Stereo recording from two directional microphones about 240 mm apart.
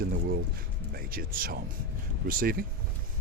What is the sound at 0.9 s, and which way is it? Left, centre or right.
Speech, right.